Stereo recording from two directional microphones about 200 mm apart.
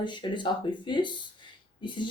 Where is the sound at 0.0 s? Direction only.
25° left (ahead or behind).